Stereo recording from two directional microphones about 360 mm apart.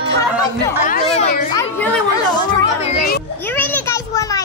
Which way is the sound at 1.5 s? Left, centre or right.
Centre.